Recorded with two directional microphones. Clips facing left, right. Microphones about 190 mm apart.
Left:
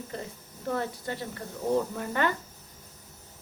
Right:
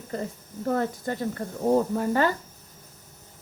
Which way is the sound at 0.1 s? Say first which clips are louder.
Right 6 dB; 45° right (ahead or behind).